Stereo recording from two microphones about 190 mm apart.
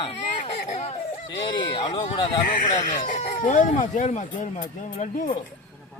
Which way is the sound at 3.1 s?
35° left (ahead or behind).